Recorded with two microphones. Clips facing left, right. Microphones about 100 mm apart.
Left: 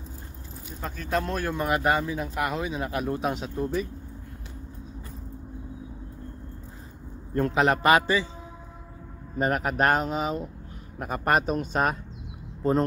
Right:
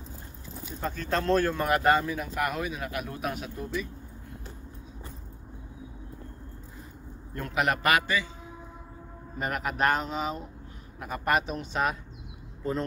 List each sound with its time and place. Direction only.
0.7 s speech: 5° left (ahead or behind); by 3.6 s 25° left (ahead or behind)
7.3 s speech: 30° left (ahead or behind)
9.4 s speech: 40° left (ahead or behind)